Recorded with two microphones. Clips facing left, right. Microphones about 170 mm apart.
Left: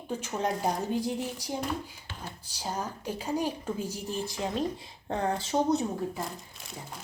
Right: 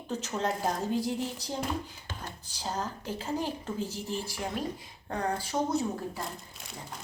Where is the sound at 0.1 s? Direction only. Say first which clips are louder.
Left 1 dB; 10° left (ahead or behind).